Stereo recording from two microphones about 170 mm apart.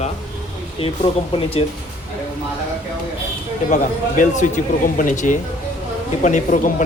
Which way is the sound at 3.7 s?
50° left (ahead or behind).